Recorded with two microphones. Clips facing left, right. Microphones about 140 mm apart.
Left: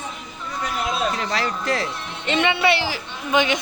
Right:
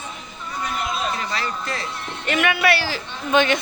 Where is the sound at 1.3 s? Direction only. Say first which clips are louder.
Left 4 dB; 90° left.